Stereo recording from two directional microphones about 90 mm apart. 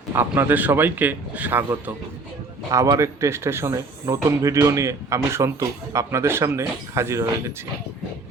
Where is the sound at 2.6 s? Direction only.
40° right (ahead or behind).